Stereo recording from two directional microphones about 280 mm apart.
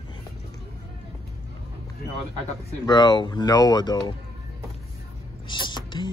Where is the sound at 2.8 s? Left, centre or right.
Centre.